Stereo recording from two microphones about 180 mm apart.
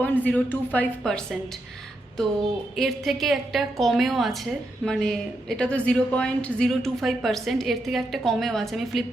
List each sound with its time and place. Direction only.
0.0 s a woman's voice: 10° left (ahead or behind)
2.7 s speech: centre (ahead or behind)